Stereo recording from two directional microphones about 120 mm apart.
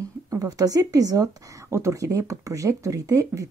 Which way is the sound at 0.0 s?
30° right (ahead or behind).